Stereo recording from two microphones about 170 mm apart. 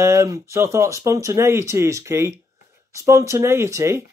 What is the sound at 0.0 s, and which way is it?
Speech, 15° right (ahead or behind).